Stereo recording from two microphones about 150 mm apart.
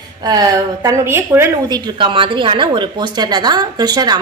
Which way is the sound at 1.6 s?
30° right (ahead or behind).